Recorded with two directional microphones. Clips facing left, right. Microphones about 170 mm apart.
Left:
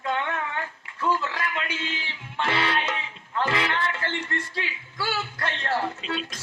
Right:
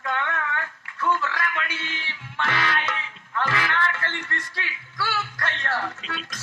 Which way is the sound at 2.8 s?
15° left (ahead or behind).